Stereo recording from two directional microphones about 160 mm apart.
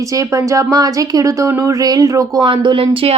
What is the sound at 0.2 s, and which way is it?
Speech, 20° right (ahead or behind).